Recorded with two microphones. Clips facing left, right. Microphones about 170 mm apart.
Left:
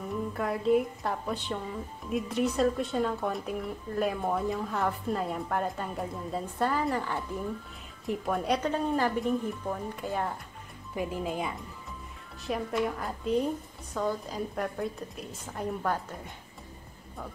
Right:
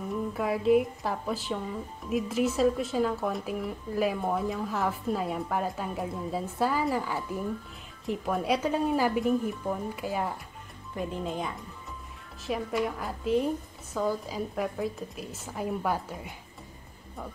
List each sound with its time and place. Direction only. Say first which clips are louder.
0.3 s speech: right 2 dB; 5° right (ahead or behind)
11.0 s speech: left 1 dB; 5° left (ahead or behind)